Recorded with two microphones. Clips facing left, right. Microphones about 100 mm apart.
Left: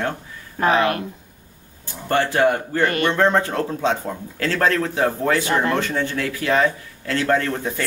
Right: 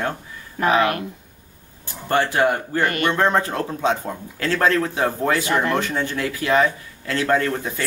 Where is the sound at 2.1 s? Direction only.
10° right (ahead or behind).